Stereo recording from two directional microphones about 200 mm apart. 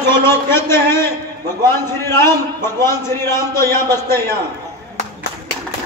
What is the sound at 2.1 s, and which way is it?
Speech, 10° left (ahead or behind).